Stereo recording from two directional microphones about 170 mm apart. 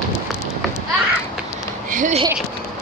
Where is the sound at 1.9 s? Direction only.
50° right (ahead or behind).